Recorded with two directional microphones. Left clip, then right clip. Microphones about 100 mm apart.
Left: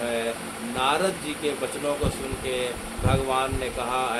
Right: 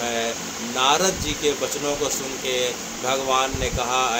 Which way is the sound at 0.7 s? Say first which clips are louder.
Right 4 dB; 70° right (ahead or behind).